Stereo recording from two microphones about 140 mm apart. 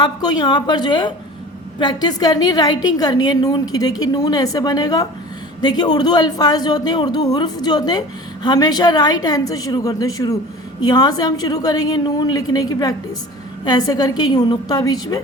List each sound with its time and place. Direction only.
0.0 s a woman's voice: 30° left (ahead or behind)